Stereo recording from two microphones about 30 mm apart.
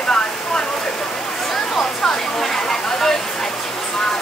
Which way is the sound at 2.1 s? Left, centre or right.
Centre.